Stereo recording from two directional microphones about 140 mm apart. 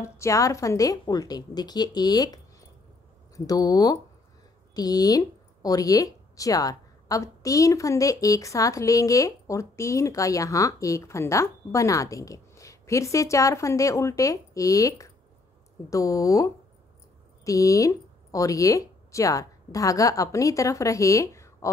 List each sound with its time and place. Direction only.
0.0 s speech: 20° left (ahead or behind)